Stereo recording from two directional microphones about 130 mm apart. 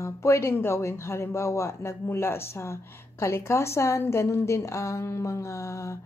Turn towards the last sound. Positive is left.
turn(degrees=20)  # may be behind; listen again after turning